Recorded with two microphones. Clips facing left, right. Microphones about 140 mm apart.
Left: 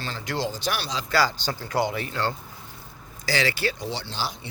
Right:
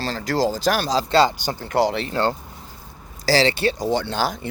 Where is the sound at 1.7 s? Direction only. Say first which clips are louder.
Right 6 dB; 70° right (ahead or behind).